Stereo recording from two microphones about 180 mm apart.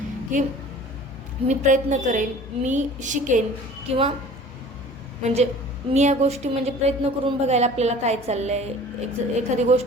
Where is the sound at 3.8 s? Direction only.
30° right (ahead or behind).